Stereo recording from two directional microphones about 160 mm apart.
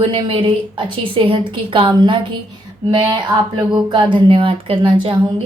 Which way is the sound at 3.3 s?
30° right (ahead or behind).